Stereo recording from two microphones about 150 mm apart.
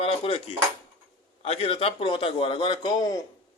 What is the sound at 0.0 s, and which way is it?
Cutlery, 40° left (ahead or behind).